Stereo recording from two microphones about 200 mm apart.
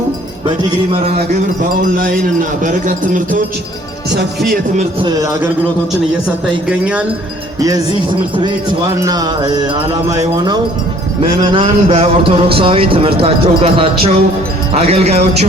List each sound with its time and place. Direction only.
2.6 s a man's voice: 40° right (ahead or behind)
6.7 s speech: 5° right (ahead or behind)
9.0 s a man's voice: 20° right (ahead or behind)